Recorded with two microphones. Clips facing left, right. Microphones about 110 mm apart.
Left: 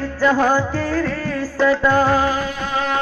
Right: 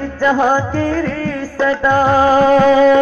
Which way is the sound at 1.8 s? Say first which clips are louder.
Right 3 dB; 15° right (ahead or behind).